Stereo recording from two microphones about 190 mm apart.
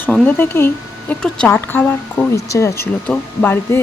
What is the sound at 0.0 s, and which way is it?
Speech, 10° left (ahead or behind).